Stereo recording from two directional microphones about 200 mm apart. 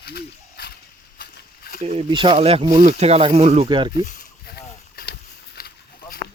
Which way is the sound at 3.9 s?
45° left (ahead or behind).